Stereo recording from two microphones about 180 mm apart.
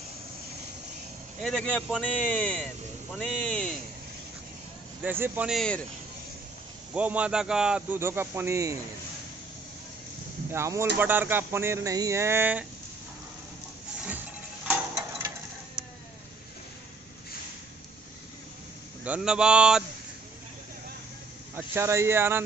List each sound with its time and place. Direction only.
1.4 s speech: 5° left (ahead or behind)
5.0 s a man's voice: 10° right (ahead or behind)
6.9 s a man's voice: 10° right (ahead or behind)
10.5 s a man's voice: 15° right (ahead or behind)
14.7 s a sound: 15° right (ahead or behind)
19.0 s speech: 5° right (ahead or behind)
21.5 s a man's voice: 15° right (ahead or behind)